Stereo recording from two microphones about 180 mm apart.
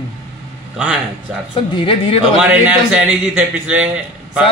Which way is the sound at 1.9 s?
35° left (ahead or behind).